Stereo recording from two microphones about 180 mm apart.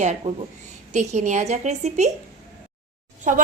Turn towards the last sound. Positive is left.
turn(degrees=-45)  # may be behind; listen again after turning